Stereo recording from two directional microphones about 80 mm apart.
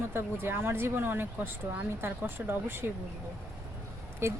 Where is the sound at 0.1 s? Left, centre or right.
Right.